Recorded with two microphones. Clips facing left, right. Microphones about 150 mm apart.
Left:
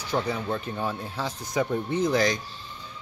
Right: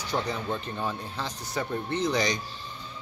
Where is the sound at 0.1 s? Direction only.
10° left (ahead or behind).